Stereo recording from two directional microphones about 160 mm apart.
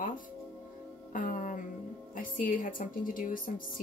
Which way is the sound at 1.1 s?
55° left (ahead or behind).